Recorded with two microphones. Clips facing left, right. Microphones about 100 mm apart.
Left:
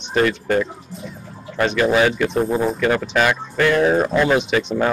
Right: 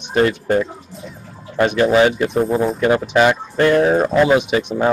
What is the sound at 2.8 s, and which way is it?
A man's voice, 25° right (ahead or behind).